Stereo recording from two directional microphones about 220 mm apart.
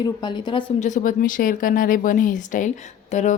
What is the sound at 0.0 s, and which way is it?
Speech, 20° left (ahead or behind).